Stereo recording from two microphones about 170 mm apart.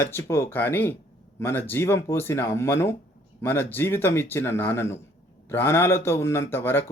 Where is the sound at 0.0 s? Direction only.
15° left (ahead or behind).